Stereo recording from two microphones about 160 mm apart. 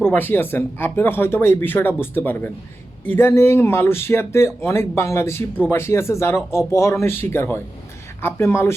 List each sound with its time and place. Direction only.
0.0 s speech: 10° left (ahead or behind)